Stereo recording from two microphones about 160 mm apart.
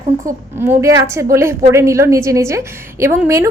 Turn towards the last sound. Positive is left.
turn(degrees=-15)  # may be behind; listen again after turning